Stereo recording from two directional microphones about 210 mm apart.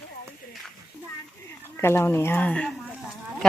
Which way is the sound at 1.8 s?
10° left (ahead or behind).